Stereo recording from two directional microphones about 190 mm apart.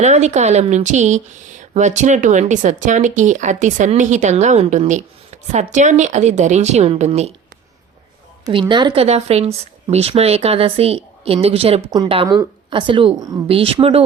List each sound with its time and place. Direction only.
0.0 s speech: 35° right (ahead or behind)
8.4 s speech: 25° right (ahead or behind)